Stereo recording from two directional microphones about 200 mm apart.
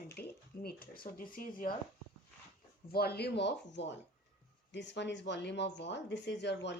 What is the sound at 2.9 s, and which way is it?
A woman's voice, 50° left (ahead or behind).